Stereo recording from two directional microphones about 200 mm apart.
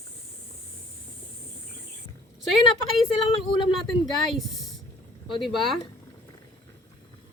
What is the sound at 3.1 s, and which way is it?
Speech, 25° left (ahead or behind).